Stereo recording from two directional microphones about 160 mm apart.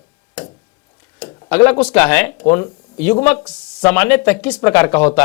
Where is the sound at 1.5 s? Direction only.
10° left (ahead or behind).